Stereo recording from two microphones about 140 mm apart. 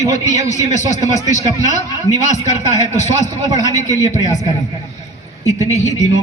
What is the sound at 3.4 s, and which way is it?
Speech, 25° right (ahead or behind).